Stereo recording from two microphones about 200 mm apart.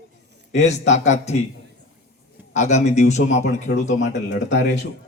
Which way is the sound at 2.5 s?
35° left (ahead or behind).